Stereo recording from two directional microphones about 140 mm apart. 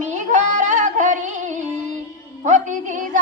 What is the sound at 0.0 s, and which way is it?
Music, 60° right (ahead or behind).